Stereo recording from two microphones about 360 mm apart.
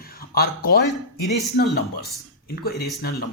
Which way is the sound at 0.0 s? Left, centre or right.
Left.